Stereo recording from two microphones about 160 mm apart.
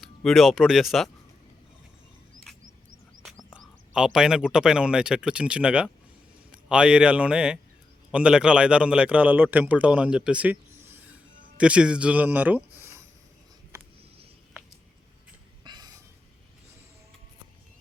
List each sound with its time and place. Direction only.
0.0 s speech: centre (ahead or behind)
3.2 s a man's voice: centre (ahead or behind)
15.6 s a sound: 25° right (ahead or behind)